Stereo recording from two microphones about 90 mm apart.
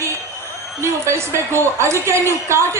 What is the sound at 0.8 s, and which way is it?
A woman's voice, 30° right (ahead or behind).